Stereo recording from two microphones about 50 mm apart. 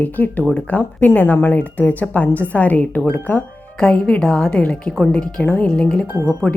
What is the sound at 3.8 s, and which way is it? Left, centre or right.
A woman's voice, left.